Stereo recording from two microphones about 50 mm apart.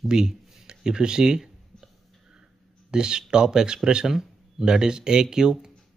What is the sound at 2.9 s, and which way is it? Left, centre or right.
Speech, centre.